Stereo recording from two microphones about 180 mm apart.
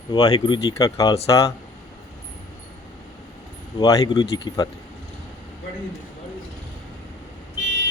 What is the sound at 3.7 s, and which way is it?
Speech, 20° left (ahead or behind).